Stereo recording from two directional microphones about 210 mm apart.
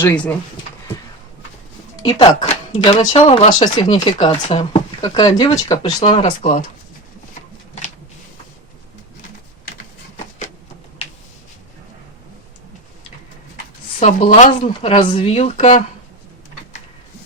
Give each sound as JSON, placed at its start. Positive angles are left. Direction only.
{"t": 2.0, "sound": "speech", "side_deg": 25}
{"t": 3.6, "sound": "speech", "side_deg": 20}
{"t": 5.0, "sound": "speech", "side_deg": 20}
{"t": 6.4, "sound": "speech", "side_deg": 40}
{"t": 14.0, "sound": "speech", "side_deg": 35}